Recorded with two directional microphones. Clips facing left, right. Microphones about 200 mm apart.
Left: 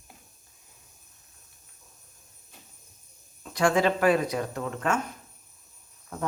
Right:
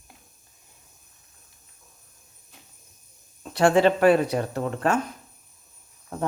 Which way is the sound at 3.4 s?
30° right (ahead or behind).